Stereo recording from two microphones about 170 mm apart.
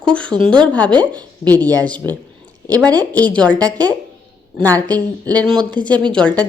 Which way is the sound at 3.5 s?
20° right (ahead or behind).